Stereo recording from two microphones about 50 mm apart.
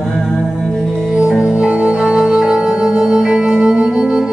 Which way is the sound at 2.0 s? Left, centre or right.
Centre.